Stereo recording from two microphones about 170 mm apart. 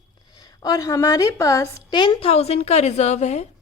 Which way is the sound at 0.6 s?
20° left (ahead or behind).